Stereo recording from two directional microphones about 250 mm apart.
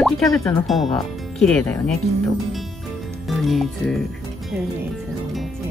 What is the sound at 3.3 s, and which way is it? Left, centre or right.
Speech, centre.